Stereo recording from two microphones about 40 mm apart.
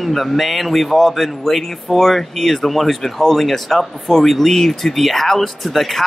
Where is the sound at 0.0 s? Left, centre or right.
Centre.